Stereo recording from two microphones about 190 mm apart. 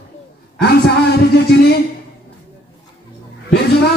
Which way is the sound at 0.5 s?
55° left (ahead or behind).